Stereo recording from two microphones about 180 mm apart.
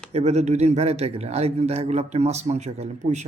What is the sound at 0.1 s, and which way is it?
A man's voice, 35° right (ahead or behind).